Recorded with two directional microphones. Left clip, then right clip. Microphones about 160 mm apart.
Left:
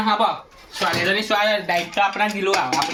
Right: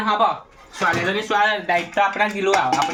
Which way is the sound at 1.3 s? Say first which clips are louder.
Right 2 dB; 5° left (ahead or behind).